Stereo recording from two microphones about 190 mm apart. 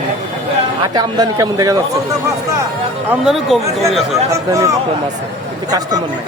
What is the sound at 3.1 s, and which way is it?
Speech, centre (ahead or behind).